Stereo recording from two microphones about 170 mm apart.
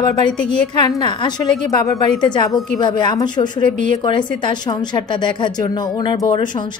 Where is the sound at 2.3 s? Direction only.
25° left (ahead or behind).